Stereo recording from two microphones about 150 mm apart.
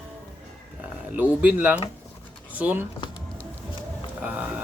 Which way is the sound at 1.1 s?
10° right (ahead or behind).